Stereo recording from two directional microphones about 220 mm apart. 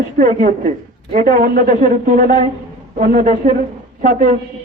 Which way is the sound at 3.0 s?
40° right (ahead or behind).